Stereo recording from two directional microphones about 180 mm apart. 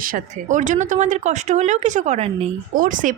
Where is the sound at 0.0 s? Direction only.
45° right (ahead or behind).